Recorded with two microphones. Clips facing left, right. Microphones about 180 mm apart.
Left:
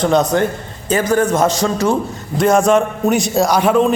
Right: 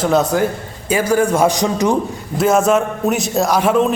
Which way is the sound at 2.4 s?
5° right (ahead or behind).